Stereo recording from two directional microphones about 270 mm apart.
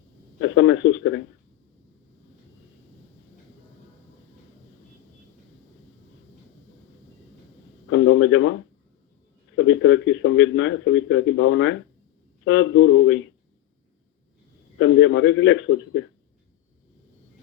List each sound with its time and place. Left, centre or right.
0.3 s speech: left
7.9 s a sound: left
9.6 s speech: left
14.8 s speech: left